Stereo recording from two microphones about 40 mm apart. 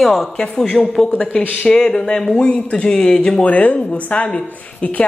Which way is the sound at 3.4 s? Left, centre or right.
Left.